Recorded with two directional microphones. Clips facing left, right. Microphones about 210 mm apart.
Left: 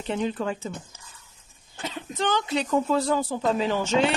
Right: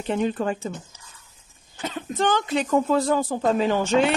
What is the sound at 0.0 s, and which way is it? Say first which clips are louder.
Speech: right 3 dB; 45° right (ahead or behind).